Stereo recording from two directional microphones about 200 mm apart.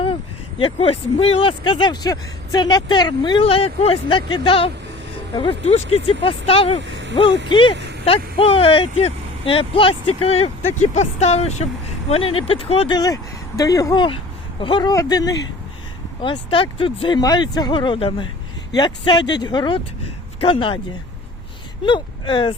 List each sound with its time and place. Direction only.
0.6 s speech: 30° left (ahead or behind)
6.8 s vehicle: 65° right (ahead or behind)
7.5 s speech: 25° left (ahead or behind)
21.8 s speech: 25° left (ahead or behind)